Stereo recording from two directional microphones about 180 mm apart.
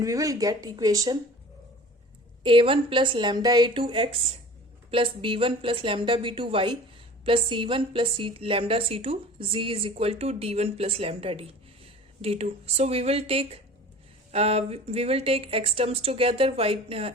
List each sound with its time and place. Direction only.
0.0 s a woman's voice: 20° right (ahead or behind)
2.4 s a woman's voice: 30° right (ahead or behind)